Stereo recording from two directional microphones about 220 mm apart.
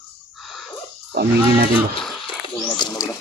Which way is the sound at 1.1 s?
45° right (ahead or behind).